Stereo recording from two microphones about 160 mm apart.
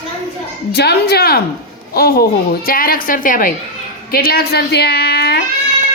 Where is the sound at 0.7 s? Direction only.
90° left; by 3.5 s 55° left (ahead or behind).